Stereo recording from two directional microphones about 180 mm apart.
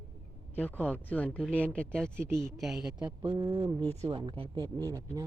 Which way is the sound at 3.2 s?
30° right (ahead or behind).